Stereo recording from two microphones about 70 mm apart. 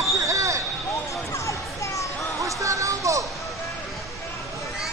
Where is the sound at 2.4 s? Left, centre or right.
Right.